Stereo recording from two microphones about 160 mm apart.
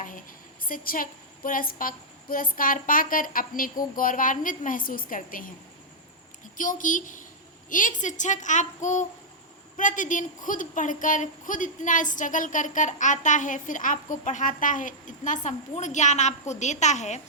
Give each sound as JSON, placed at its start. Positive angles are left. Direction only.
{"t": 0.6, "sound": "a woman's voice", "side_deg": 60}
{"t": 6.6, "sound": "a woman's voice", "side_deg": 55}